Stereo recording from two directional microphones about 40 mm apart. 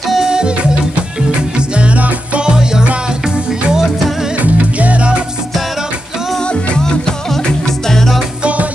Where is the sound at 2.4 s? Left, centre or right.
Right.